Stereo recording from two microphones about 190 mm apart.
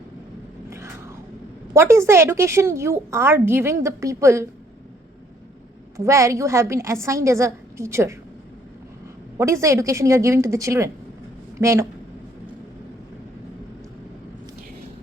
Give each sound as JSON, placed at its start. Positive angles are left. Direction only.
{"t": 0.7, "sound": "a sound", "side_deg": -15}
{"t": 1.7, "sound": "a woman's voice", "side_deg": -15}
{"t": 6.0, "sound": "a woman's voice", "side_deg": -15}
{"t": 9.4, "sound": "a woman's voice", "side_deg": -15}